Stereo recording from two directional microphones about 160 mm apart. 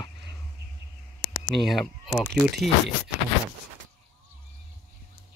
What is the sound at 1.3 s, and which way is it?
Speech, centre (ahead or behind).